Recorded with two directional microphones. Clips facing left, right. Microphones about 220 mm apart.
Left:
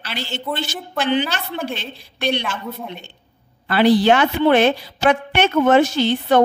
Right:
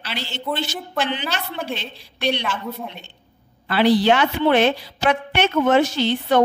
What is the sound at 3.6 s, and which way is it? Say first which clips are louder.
A woman's voice: left 2 dB; 50° left (ahead or behind).